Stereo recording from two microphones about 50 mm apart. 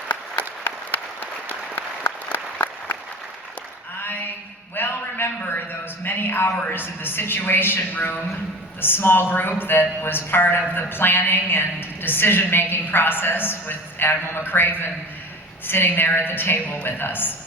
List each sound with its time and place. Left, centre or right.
0.6 s applause: left
4.0 s a sound: left
6.1 s a man's voice: left